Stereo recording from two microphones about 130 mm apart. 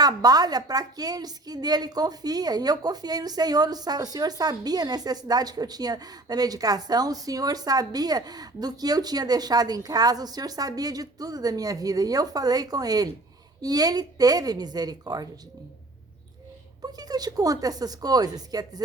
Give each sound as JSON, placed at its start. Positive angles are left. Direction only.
{"t": 0.0, "sound": "a woman's voice", "side_deg": -30}
{"t": 16.8, "sound": "a woman's voice", "side_deg": -30}